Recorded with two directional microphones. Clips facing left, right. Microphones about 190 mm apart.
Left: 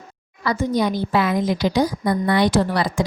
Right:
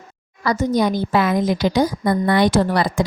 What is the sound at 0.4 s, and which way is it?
A woman's voice, 40° right (ahead or behind).